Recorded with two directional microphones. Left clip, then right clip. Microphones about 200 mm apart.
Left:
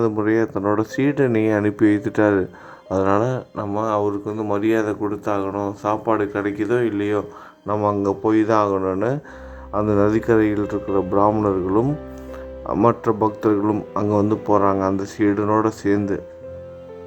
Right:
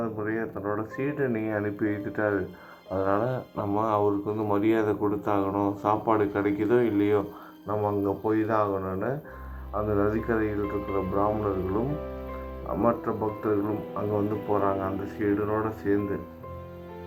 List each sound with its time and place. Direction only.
0.0 s speech: 45° left (ahead or behind); by 7.3 s 30° left (ahead or behind)
7.7 s speech: 40° left (ahead or behind)